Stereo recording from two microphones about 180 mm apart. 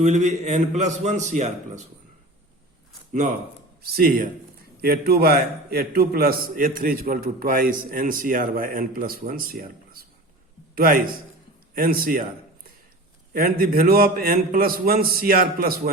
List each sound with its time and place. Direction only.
0.0 s a man's voice: 40° right (ahead or behind)
3.1 s a man's voice: 45° right (ahead or behind)
3.8 s a man's voice: 55° right (ahead or behind)
13.3 s a man's voice: 55° right (ahead or behind)